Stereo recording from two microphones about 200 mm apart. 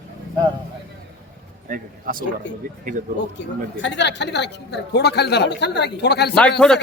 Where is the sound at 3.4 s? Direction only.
60° left (ahead or behind).